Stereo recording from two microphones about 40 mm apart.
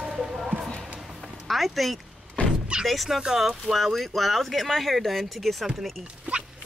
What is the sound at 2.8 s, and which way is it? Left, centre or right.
Speech, centre.